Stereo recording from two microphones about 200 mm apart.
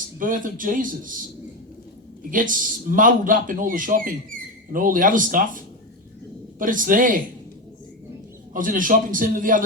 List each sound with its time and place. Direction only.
0.2 s speech: 40° right (ahead or behind)
2.3 s speech: 40° right (ahead or behind)
8.5 s speech: 45° right (ahead or behind)